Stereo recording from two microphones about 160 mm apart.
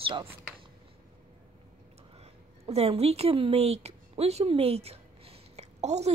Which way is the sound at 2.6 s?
40° right (ahead or behind).